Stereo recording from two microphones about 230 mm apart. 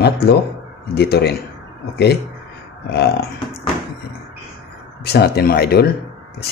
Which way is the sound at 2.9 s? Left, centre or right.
Left.